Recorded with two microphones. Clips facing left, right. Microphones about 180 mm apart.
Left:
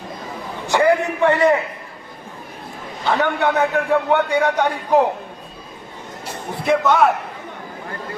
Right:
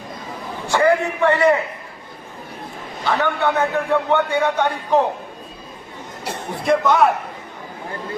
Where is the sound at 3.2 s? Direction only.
15° left (ahead or behind).